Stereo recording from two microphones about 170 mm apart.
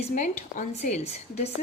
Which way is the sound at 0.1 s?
50° left (ahead or behind).